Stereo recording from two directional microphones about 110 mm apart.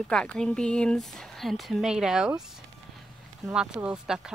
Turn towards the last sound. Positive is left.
turn(degrees=-5)  # may be behind; listen again after turning